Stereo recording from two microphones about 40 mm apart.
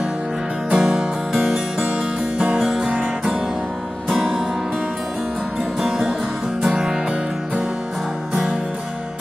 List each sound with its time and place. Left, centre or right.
0.7 s music: centre
1.8 s music: right
2.6 s music: centre
2.9 s music: right
4.1 s music: centre